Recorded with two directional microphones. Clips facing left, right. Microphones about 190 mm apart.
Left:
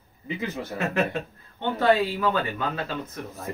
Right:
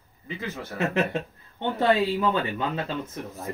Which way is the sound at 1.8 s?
25° right (ahead or behind).